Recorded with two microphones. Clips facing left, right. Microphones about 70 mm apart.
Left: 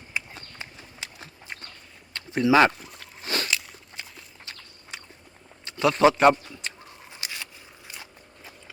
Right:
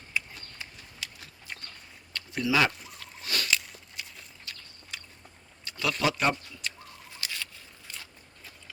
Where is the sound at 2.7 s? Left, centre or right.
Centre.